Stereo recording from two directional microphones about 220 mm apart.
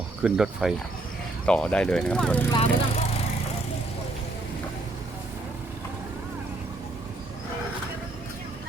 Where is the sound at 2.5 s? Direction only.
25° left (ahead or behind).